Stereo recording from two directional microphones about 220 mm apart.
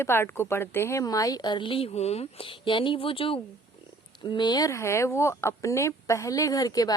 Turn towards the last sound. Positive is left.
turn(degrees=15)  # may be behind; listen again after turning